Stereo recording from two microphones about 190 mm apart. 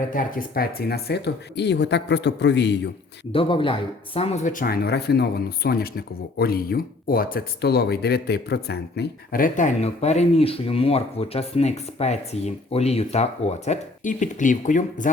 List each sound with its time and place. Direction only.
0.1 s speech: 45° left (ahead or behind); by 2.9 s 65° left (ahead or behind)
3.3 s speech: 25° left (ahead or behind)